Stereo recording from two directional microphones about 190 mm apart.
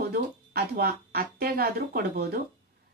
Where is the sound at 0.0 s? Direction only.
55° right (ahead or behind).